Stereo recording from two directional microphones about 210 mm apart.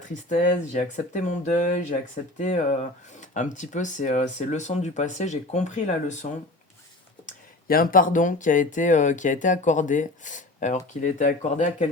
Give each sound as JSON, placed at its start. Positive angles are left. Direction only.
{"t": 0.3, "sound": "speech", "side_deg": 35}
{"t": 7.3, "sound": "speech", "side_deg": 40}